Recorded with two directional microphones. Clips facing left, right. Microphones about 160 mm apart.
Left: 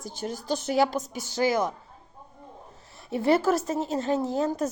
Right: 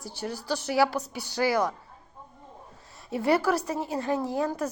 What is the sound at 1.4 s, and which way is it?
Speech, 20° left (ahead or behind).